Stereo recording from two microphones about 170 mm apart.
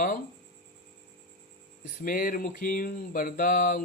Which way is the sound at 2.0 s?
55° left (ahead or behind).